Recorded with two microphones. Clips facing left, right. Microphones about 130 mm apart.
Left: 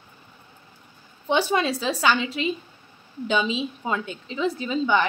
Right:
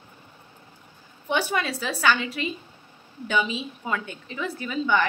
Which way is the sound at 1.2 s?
25° left (ahead or behind).